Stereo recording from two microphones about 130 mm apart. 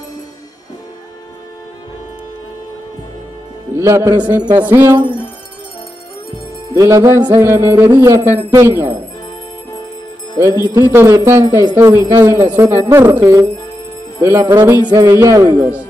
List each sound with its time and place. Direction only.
3.7 s speech: 20° right (ahead or behind)
4.4 s music: 35° right (ahead or behind)
6.7 s speech: 25° right (ahead or behind)
7.3 s speech: 20° right (ahead or behind)
10.3 s speech: 25° right (ahead or behind)
14.4 s music: 30° right (ahead or behind)
14.9 s speech: 25° right (ahead or behind)